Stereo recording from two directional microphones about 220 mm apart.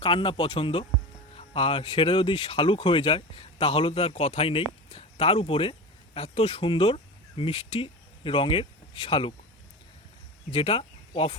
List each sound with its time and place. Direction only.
0.0 s speech: 20° left (ahead or behind)
10.5 s speech: 25° left (ahead or behind)